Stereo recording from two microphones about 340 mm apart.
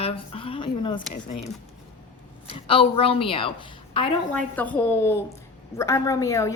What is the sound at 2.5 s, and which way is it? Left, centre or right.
A woman's voice, centre.